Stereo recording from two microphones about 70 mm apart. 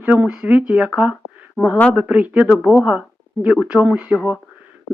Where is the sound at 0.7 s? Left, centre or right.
Centre.